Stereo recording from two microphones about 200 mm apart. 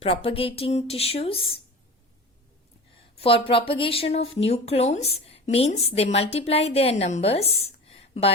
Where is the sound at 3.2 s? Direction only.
25° left (ahead or behind).